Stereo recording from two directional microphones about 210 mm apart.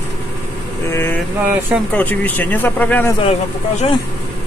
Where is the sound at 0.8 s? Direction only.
10° left (ahead or behind).